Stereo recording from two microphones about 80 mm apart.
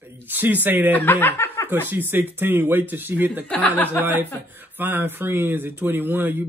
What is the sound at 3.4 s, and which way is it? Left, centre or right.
Speech, centre.